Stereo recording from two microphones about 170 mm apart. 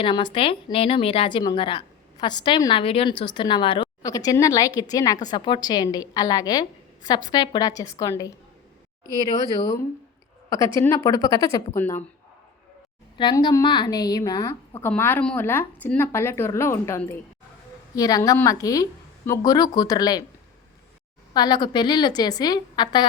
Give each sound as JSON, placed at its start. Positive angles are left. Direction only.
{"t": 0.0, "sound": "a woman's voice", "side_deg": 30}
{"t": 13.1, "sound": "a woman's voice", "side_deg": 25}
{"t": 21.3, "sound": "a woman's voice", "side_deg": 25}